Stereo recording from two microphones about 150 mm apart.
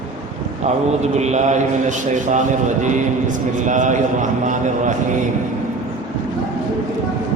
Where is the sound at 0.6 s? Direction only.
50° right (ahead or behind).